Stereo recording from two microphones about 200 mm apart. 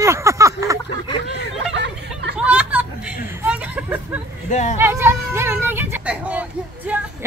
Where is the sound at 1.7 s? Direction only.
60° right (ahead or behind).